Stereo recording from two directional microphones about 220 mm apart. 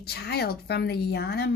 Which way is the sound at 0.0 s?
45° left (ahead or behind).